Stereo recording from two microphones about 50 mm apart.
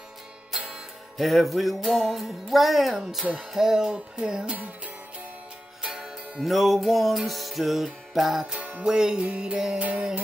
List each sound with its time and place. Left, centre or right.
1.1 s music: centre
5.8 s music: centre
8.5 s music: right
8.8 s music: centre
9.3 s music: right